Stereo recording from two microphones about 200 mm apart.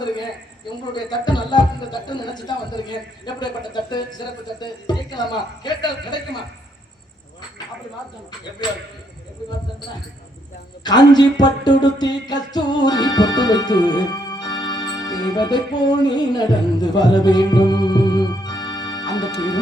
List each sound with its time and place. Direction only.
0.9 s music: 20° left (ahead or behind)
8.6 s music: 20° left (ahead or behind)
10.8 s music: 20° left (ahead or behind)